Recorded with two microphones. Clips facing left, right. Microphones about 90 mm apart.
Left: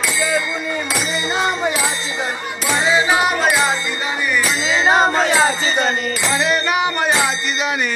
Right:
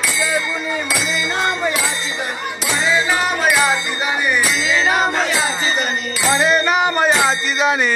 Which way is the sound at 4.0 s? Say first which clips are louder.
Right 3 dB; 20° right (ahead or behind).